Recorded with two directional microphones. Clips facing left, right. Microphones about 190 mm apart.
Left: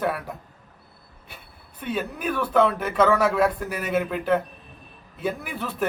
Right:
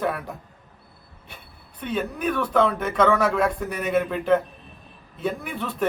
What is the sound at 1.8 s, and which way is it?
A man's voice, 5° left (ahead or behind).